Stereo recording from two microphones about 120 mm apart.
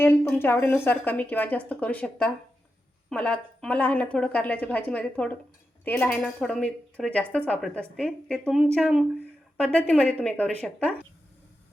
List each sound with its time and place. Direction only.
0.0 s a woman's voice: 20° left (ahead or behind)
6.1 s a woman's voice: 5° left (ahead or behind)